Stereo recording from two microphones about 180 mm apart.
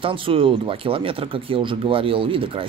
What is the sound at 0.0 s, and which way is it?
Speech, 30° right (ahead or behind).